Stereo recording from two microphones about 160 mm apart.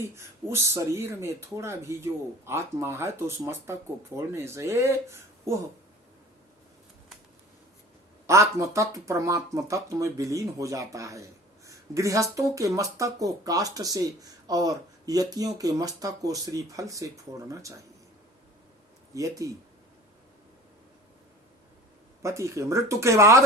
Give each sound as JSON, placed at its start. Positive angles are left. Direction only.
{"t": 0.2, "sound": "speech", "side_deg": -15}
{"t": 8.3, "sound": "speech", "side_deg": -20}
{"t": 19.1, "sound": "speech", "side_deg": -20}
{"t": 22.2, "sound": "speech", "side_deg": -20}